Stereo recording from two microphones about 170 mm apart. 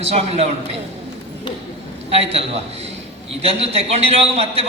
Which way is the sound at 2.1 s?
35° right (ahead or behind).